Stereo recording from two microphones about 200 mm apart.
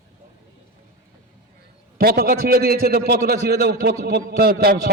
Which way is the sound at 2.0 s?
50° right (ahead or behind).